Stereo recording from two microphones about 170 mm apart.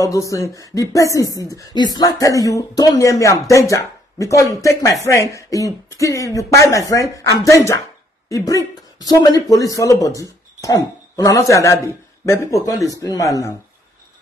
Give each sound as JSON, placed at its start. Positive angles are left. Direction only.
{"t": 0.0, "sound": "speech", "side_deg": 20}